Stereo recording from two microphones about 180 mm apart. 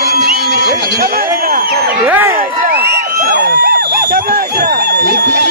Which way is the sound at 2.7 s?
60° right (ahead or behind).